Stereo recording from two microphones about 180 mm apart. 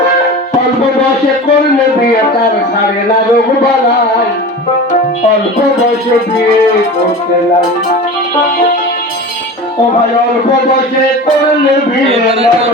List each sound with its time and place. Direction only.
12.0 s a man's voice: 35° right (ahead or behind)